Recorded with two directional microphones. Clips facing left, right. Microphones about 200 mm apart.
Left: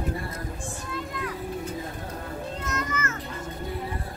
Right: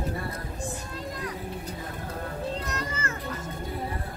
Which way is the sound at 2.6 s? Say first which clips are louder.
Left 2 dB; 35° right (ahead or behind).